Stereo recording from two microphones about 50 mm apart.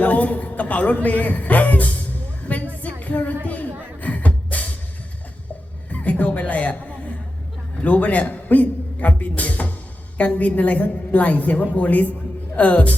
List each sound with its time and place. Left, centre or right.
0.0 s a man's voice: left
2.5 s music: left
5.9 s music: left
10.2 s a woman's voice: left